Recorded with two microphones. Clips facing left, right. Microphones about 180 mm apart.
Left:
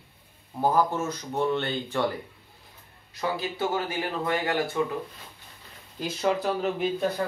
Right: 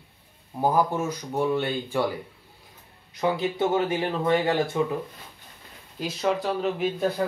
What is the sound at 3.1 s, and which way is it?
Speech, 20° right (ahead or behind).